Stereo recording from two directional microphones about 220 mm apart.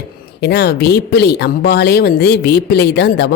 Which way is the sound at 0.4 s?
50° left (ahead or behind).